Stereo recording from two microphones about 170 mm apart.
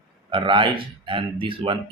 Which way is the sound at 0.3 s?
30° right (ahead or behind).